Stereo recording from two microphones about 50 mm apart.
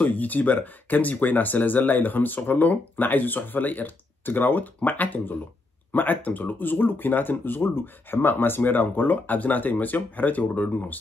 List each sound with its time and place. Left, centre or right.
0.0 s speech: left